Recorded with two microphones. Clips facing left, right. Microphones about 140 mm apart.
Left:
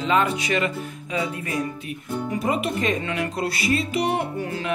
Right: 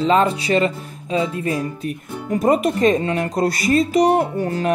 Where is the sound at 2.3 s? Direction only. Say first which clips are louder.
Right 9 dB; 45° right (ahead or behind).